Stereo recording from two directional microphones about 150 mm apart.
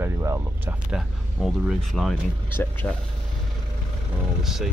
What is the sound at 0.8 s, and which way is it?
Speech, 5° right (ahead or behind).